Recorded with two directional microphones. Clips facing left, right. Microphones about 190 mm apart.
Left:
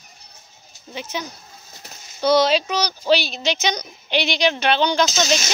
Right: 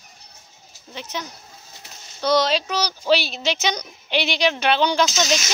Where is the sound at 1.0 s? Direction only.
5° left (ahead or behind).